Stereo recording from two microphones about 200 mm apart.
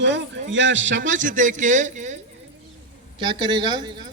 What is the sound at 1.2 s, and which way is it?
Speech, 40° right (ahead or behind).